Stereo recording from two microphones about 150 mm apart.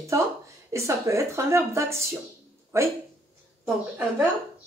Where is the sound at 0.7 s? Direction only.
20° right (ahead or behind).